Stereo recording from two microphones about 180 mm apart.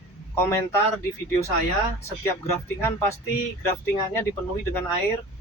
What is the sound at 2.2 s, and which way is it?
Speech, 15° left (ahead or behind).